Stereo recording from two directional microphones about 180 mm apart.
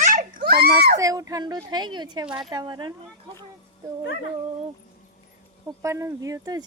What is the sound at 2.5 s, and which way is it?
Speech, 25° right (ahead or behind).